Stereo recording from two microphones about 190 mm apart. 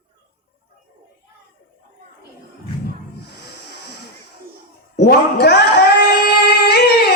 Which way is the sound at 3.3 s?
60° left (ahead or behind).